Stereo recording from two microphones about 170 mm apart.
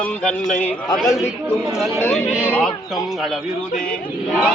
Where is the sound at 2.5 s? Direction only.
5° left (ahead or behind).